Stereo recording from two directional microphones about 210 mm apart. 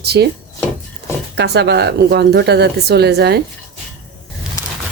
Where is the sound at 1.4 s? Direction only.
55° right (ahead or behind).